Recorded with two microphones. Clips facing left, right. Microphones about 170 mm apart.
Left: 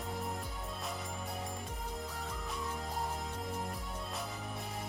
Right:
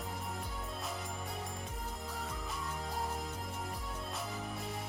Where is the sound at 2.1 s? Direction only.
Centre (ahead or behind).